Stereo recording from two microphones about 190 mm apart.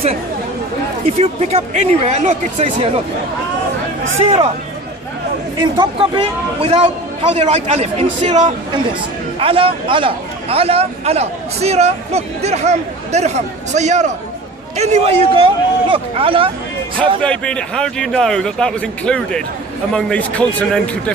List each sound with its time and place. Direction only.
1.0 s a man's voice: 35° right (ahead or behind)
5.6 s a man's voice: 25° right (ahead or behind)
17.2 s a man's voice: 5° left (ahead or behind)